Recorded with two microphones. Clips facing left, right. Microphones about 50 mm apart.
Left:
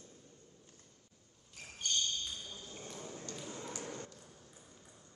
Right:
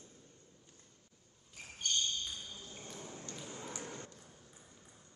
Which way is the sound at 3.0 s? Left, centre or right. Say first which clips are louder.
Left 2 dB; right.